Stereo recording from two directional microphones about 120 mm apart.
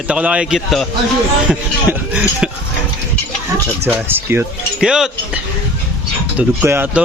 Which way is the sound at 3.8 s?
20° right (ahead or behind).